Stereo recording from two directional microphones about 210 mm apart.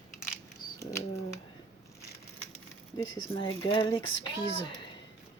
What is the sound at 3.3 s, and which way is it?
Speech, 25° left (ahead or behind).